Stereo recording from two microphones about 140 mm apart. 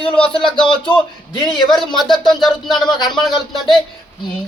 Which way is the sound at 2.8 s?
30° left (ahead or behind).